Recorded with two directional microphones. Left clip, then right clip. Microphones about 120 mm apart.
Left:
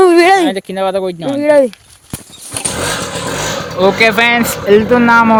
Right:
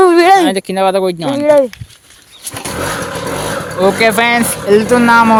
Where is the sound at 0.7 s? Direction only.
90° right.